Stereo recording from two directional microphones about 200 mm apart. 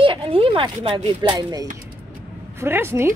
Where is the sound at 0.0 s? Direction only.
25° right (ahead or behind).